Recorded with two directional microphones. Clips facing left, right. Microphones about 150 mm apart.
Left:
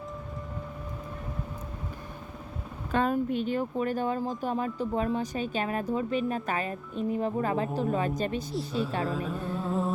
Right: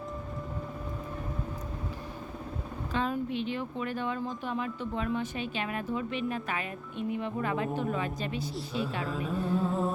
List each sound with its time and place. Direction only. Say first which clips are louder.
2.9 s speech: left 5 dB; 50° left (ahead or behind)
8.5 s music: left 4 dB; centre (ahead or behind)